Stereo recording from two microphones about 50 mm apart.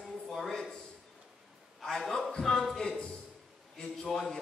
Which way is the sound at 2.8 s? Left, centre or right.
Centre.